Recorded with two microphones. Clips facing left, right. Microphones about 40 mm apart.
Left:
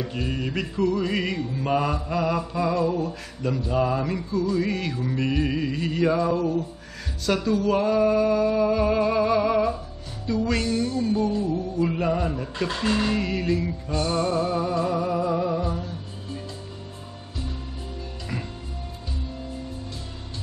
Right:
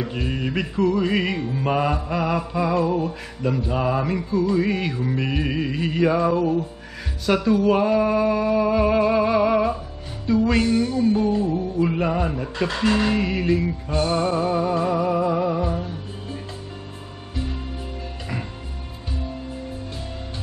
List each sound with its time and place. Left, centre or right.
0.0 s music: centre